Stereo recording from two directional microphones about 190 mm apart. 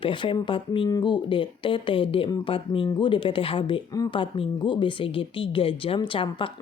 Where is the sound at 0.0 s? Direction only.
25° left (ahead or behind).